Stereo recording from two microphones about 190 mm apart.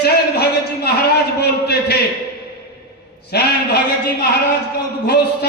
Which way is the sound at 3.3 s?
60° left (ahead or behind).